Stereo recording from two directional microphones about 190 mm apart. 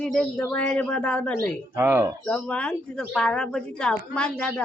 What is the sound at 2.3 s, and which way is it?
A woman's voice, 5° left (ahead or behind).